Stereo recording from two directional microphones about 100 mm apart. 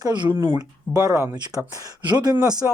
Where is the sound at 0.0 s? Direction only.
45° right (ahead or behind).